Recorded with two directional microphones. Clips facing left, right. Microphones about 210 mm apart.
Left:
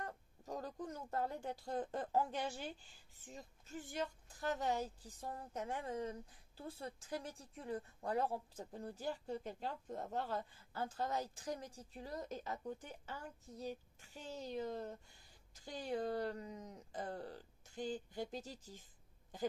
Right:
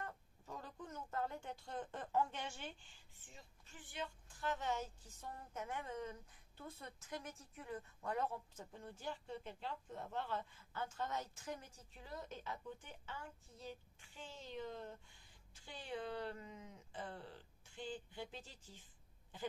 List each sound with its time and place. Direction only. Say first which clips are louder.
0.0 s speech: left 3 dB; 40° left (ahead or behind)